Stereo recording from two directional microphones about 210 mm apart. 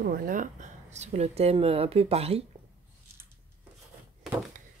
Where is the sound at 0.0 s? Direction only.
45° right (ahead or behind); by 2.4 s 30° right (ahead or behind).